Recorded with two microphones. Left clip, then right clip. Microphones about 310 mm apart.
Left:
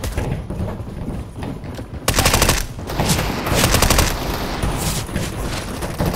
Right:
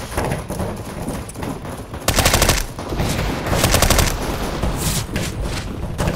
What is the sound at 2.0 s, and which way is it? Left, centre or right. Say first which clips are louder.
Machine gun: even; centre.